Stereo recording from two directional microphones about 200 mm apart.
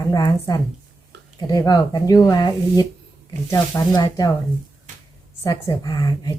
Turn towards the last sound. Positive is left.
turn(degrees=20)  # may be behind; listen again after turning